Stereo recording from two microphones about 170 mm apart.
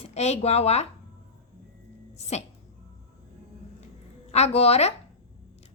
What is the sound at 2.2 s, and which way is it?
Speech, 40° left (ahead or behind).